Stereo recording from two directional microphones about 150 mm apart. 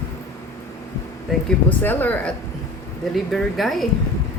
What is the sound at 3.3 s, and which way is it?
Speech, centre (ahead or behind).